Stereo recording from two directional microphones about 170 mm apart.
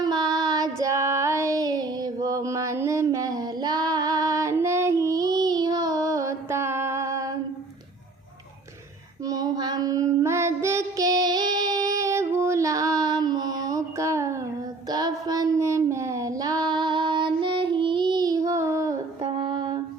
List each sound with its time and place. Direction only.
0.0 s child singing: 25° right (ahead or behind)
9.2 s child singing: 20° right (ahead or behind)
19.2 s a sound: 30° right (ahead or behind)